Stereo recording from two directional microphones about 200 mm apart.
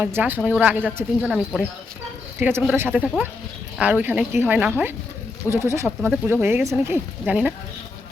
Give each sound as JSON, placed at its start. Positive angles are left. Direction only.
{"t": 0.0, "sound": "speech", "side_deg": -10}